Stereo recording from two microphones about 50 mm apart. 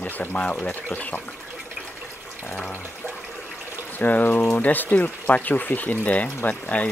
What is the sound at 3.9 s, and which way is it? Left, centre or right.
Speech, left.